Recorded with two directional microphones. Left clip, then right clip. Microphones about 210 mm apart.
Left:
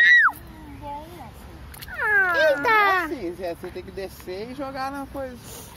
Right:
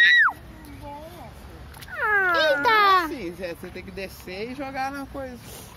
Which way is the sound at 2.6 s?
5° right (ahead or behind).